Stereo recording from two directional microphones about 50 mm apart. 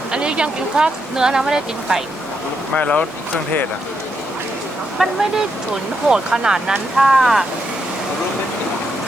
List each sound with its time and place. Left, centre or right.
0.1 s speech: centre
2.7 s speech: left
5.0 s speech: centre